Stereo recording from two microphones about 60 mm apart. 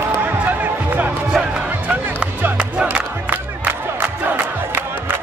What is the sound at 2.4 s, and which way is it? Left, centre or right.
Music, right.